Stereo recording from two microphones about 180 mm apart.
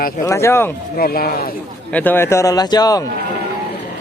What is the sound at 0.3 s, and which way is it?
Speech, 15° left (ahead or behind).